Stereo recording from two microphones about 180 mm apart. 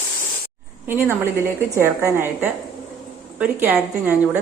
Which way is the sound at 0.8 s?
15° right (ahead or behind).